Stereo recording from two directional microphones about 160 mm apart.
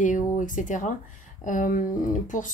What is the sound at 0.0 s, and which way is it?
Speech, 55° left (ahead or behind).